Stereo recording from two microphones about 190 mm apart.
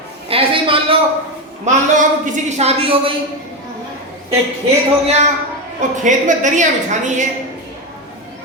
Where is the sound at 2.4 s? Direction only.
35° right (ahead or behind).